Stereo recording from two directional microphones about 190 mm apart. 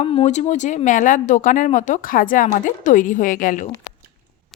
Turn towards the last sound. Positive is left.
turn(degrees=45)  # may be behind; listen again after turning